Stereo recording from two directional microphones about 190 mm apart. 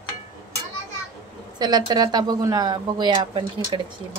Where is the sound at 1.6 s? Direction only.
20° right (ahead or behind).